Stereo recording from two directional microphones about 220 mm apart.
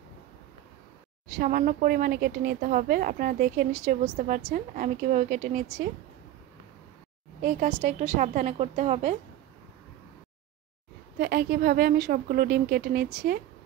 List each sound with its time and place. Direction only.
1.4 s a woman's voice: 40° right (ahead or behind)
7.4 s a woman's voice: 30° right (ahead or behind)
11.1 s a woman's voice: 45° right (ahead or behind)